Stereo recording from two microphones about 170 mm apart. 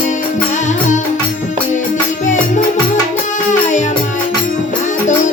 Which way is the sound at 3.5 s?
45° left (ahead or behind).